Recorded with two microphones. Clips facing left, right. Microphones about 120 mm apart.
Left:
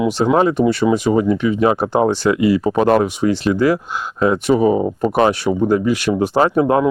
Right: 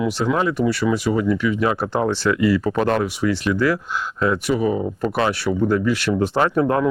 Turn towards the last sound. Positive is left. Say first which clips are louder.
# left 4 dB
turn(degrees=15)  # may be behind; listen again after turning